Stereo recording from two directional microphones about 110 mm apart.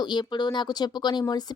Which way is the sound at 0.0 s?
45° left (ahead or behind).